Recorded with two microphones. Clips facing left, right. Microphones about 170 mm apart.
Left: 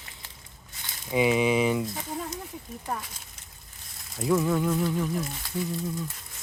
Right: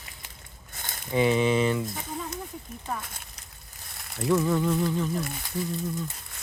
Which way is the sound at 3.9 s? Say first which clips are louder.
Right 1 dB; 65° right (ahead or behind).